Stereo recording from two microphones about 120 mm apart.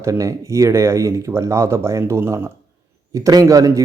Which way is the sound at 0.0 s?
25° right (ahead or behind).